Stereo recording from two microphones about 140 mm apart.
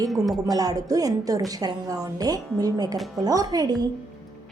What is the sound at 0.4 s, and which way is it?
A woman's voice, 25° right (ahead or behind).